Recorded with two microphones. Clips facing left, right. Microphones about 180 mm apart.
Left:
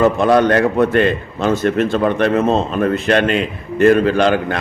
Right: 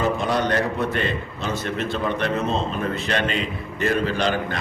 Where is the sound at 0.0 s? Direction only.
65° left (ahead or behind).